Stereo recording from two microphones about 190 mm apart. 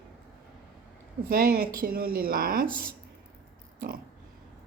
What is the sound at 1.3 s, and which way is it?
A woman's voice, 50° right (ahead or behind).